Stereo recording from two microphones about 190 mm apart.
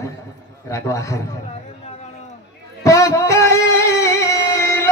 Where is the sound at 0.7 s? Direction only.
15° left (ahead or behind).